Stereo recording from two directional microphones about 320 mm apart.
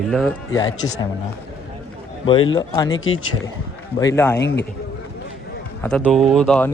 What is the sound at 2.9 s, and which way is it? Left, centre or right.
Speech, left.